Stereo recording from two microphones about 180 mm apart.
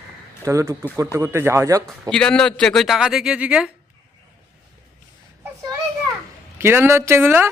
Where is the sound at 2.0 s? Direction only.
5° left (ahead or behind).